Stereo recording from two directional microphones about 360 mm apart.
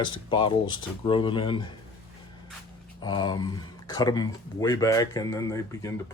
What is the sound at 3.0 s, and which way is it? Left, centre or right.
Speech, centre.